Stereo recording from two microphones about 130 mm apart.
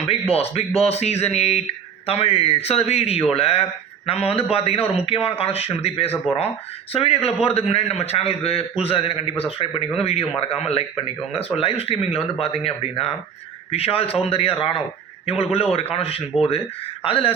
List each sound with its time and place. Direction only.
0.1 s a man's voice: 50° left (ahead or behind)
6.3 s speech: 5° right (ahead or behind)
6.9 s a man's voice: 50° left (ahead or behind)